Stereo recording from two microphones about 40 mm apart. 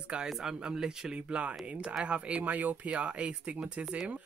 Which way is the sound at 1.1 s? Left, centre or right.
Right.